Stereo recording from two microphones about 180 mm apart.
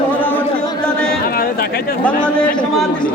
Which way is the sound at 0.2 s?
10° left (ahead or behind).